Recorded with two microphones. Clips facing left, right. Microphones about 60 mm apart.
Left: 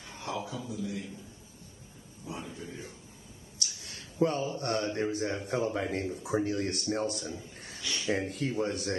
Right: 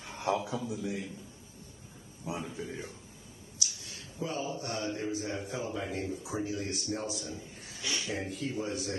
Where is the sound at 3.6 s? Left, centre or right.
Left.